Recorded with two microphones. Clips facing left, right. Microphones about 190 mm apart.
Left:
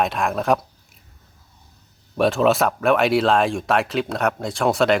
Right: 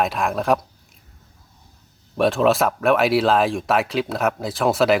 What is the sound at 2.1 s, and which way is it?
Speech, centre (ahead or behind).